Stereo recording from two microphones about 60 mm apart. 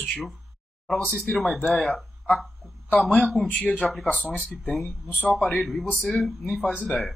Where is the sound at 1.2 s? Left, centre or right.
Centre.